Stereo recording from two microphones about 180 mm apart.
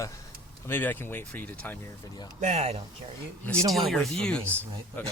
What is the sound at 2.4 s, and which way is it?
Speech, 40° right (ahead or behind).